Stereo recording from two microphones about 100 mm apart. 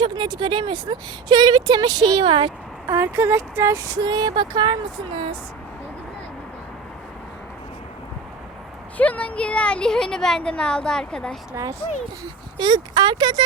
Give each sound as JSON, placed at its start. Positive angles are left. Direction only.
{"t": 0.0, "sound": "a woman's voice", "side_deg": -50}
{"t": 2.8, "sound": "speech", "side_deg": -25}
{"t": 4.0, "sound": "a woman's voice", "side_deg": -45}
{"t": 9.0, "sound": "speech", "side_deg": 15}
{"t": 11.5, "sound": "speech", "side_deg": -30}
{"t": 12.5, "sound": "a woman's voice", "side_deg": -50}